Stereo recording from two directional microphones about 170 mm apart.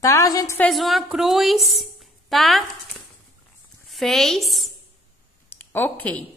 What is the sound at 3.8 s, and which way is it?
Speech, centre (ahead or behind).